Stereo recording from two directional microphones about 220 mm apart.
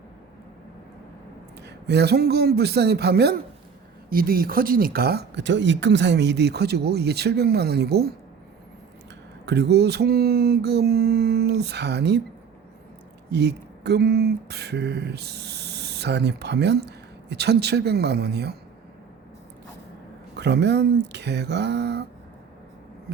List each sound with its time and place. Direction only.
1.6 s speech: 50° right (ahead or behind)
9.5 s speech: 50° right (ahead or behind)
13.3 s speech: 50° right (ahead or behind)
20.3 s speech: 50° right (ahead or behind)
23.1 s a sound: 50° right (ahead or behind)